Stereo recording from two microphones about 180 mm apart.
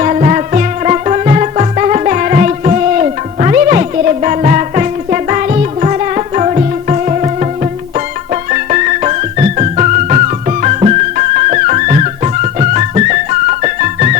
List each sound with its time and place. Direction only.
0.0 s music: 40° right (ahead or behind)